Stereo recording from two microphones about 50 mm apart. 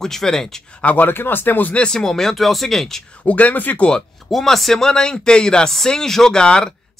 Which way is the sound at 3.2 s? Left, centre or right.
Left.